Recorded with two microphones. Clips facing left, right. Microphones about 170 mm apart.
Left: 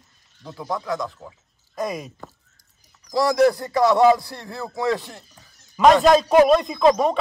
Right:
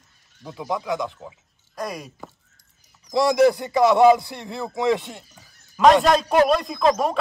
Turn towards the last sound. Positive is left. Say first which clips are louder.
# left 3 dB
turn(degrees=0)  # may be behind; listen again after turning